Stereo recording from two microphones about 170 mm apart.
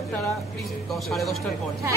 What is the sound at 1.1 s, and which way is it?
Speech, centre (ahead or behind).